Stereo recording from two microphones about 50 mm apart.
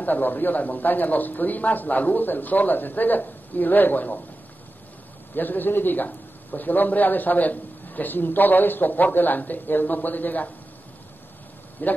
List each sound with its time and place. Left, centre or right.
0.0 s a man's voice: left
5.3 s a man's voice: left
11.8 s a man's voice: left